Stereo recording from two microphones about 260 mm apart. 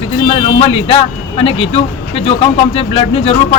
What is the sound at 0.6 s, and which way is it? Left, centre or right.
Speech, left.